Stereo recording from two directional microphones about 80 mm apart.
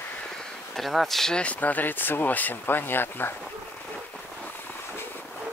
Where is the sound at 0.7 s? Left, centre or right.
Centre; by 3.3 s left.